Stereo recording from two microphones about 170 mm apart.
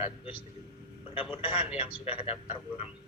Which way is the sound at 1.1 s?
30° left (ahead or behind).